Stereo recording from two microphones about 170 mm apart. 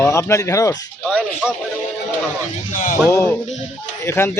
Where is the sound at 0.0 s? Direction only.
15° left (ahead or behind).